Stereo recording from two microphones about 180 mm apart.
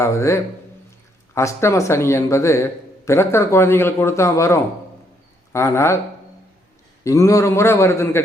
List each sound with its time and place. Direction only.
0.0 s speech: 15° left (ahead or behind)
7.0 s speech: 15° left (ahead or behind)